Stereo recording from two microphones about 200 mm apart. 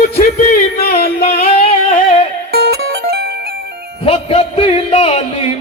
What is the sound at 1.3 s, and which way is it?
Music, 30° left (ahead or behind).